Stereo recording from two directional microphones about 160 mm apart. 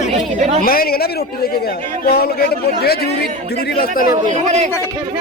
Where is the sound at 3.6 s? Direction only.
65° left (ahead or behind).